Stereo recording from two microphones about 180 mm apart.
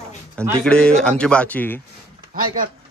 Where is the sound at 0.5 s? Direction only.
5° left (ahead or behind).